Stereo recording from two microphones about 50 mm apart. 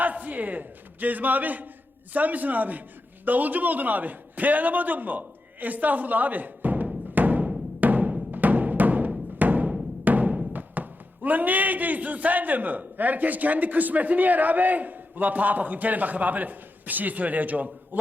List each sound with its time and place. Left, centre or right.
0.0 s a man's voice: right
7.1 s music: right
10.5 s speech: right